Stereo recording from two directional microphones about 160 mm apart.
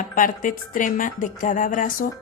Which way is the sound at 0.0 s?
55° left (ahead or behind).